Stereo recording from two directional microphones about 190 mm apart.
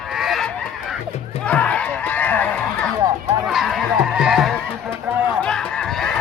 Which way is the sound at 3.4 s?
Centre (ahead or behind).